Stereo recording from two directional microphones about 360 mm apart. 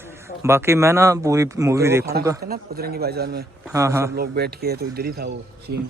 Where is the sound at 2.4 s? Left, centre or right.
Right.